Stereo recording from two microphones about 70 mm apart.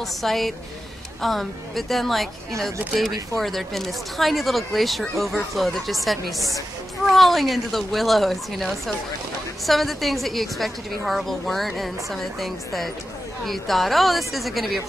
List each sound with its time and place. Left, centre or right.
0.0 s a woman's voice: centre
2.8 s speech: right
3.3 s a woman's voice: centre
7.0 s a woman's voice: centre